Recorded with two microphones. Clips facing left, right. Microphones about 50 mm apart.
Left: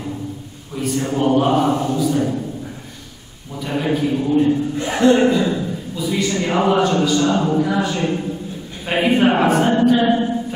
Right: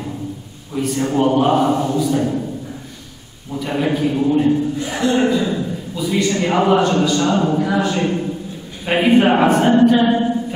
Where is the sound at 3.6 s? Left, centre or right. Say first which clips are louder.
Right 1 dB; centre.